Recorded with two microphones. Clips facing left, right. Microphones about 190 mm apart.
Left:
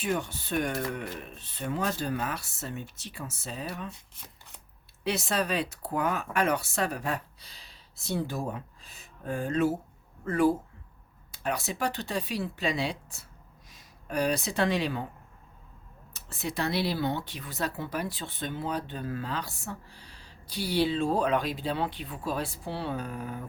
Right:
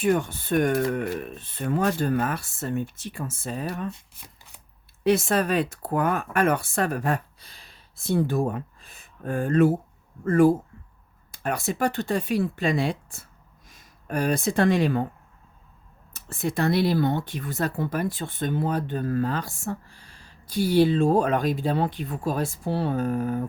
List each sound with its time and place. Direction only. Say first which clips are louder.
0.0 s speech: right 8 dB; 55° right (ahead or behind)
5.0 s speech: right 8 dB; 50° right (ahead or behind)
16.1 s speech: right 6 dB; 50° right (ahead or behind)